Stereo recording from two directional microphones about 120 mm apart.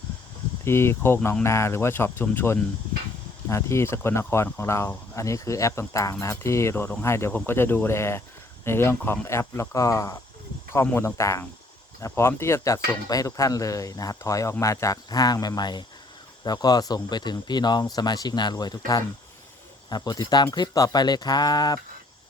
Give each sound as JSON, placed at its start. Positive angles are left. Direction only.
{"t": 0.6, "sound": "speech", "side_deg": 20}